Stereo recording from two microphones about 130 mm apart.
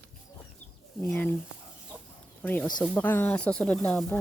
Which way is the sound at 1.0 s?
10° left (ahead or behind).